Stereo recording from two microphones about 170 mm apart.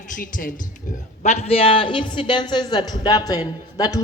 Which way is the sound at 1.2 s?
35° left (ahead or behind).